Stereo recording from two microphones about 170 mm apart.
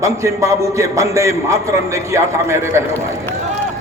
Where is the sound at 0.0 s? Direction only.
20° right (ahead or behind).